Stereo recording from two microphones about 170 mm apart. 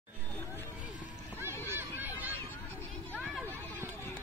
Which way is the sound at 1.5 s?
15° left (ahead or behind).